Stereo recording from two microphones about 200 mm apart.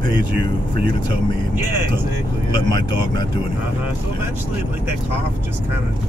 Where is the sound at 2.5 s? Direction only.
25° left (ahead or behind).